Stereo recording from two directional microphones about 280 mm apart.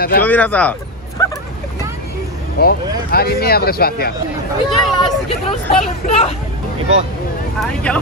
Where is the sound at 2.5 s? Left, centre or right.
Left.